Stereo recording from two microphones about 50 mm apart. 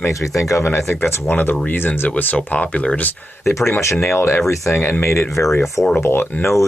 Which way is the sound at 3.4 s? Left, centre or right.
Left.